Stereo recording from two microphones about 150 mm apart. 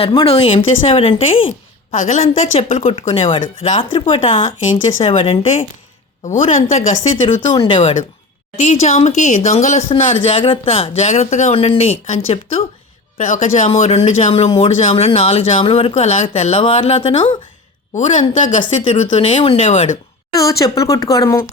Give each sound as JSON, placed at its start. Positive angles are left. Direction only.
{"t": 0.2, "sound": "speech", "side_deg": 40}
{"t": 2.0, "sound": "speech", "side_deg": 50}
{"t": 6.2, "sound": "speech", "side_deg": 50}
{"t": 7.4, "sound": "speech", "side_deg": 30}
{"t": 7.8, "sound": "speech", "side_deg": 50}
{"t": 9.9, "sound": "speech", "side_deg": 35}
{"t": 18.4, "sound": "speech", "side_deg": 55}
{"t": 20.3, "sound": "speech", "side_deg": 20}